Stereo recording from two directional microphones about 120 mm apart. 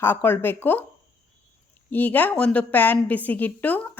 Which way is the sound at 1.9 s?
15° left (ahead or behind).